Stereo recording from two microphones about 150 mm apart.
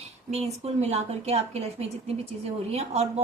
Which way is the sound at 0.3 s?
45° right (ahead or behind).